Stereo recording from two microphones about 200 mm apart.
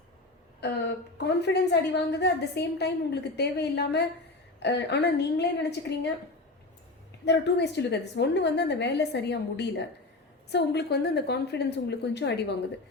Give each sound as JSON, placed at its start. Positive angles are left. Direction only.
{"t": 0.6, "sound": "a woman's voice", "side_deg": 55}
{"t": 7.3, "sound": "a woman's voice", "side_deg": 55}